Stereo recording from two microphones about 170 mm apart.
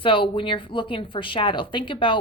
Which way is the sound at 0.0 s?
30° left (ahead or behind).